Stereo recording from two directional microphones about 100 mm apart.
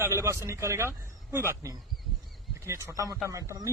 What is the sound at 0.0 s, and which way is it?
A man's voice, 30° right (ahead or behind).